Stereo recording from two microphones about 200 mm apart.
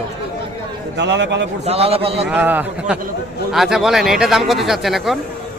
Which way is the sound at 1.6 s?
30° right (ahead or behind).